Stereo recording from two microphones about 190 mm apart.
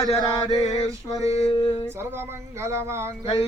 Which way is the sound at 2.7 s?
15° right (ahead or behind).